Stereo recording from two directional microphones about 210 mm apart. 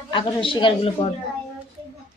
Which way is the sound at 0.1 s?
25° left (ahead or behind).